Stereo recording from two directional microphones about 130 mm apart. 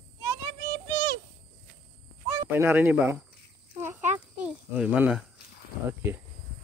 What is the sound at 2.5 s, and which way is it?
Speech, 15° right (ahead or behind).